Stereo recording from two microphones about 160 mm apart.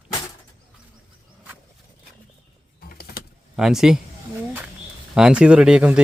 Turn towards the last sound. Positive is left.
turn(degrees=-5)  # may be behind; listen again after turning